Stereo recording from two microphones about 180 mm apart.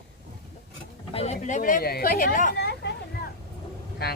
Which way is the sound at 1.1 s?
35° left (ahead or behind).